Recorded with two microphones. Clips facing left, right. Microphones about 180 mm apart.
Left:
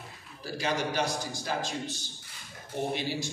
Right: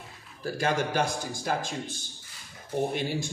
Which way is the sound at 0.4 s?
50° right (ahead or behind).